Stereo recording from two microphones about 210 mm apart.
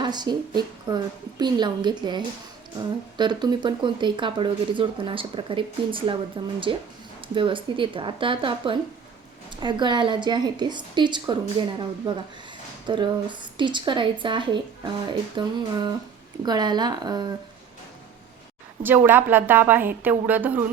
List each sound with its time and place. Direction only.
0.0 s speech: 20° right (ahead or behind)
12.9 s speech: 20° right (ahead or behind)
18.8 s a woman's voice: 10° right (ahead or behind)